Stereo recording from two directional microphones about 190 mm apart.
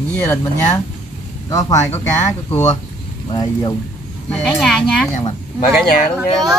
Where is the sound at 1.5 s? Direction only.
20° left (ahead or behind).